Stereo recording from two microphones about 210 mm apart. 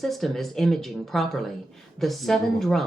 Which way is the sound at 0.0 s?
Centre (ahead or behind).